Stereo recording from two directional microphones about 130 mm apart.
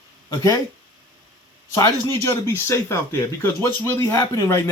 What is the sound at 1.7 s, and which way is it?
Speech, 20° left (ahead or behind).